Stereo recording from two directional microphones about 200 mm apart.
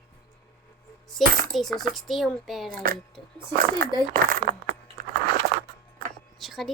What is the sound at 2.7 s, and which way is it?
Speech, 45° right (ahead or behind).